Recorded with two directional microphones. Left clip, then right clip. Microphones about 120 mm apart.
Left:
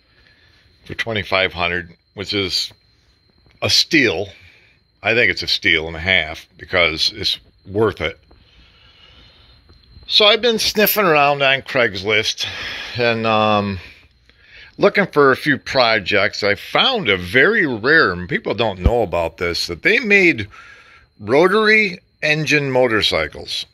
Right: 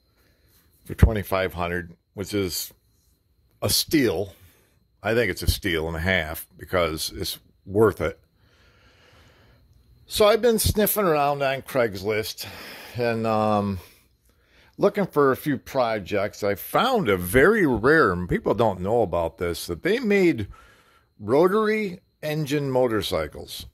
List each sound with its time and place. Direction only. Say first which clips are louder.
0.8 s speech: left 5 dB; 60° right (ahead or behind)
2.1 s speech: left 7 dB; 70° right (ahead or behind)
3.5 s speech: left 8 dB; 65° right (ahead or behind)
5.0 s speech: left 8 dB; 80° right
6.0 s speech: left 8 dB; 65° right (ahead or behind)
10.2 s speech: left 3 dB; 80° right
10.7 s speech: left 7 dB; 25° right (ahead or behind)
16.5 s speech: left 5 dB; 75° right (ahead or behind)
18.8 s speech: left 4 dB; 35° right (ahead or behind)
19.5 s speech: left 9 dB; 50° right (ahead or behind)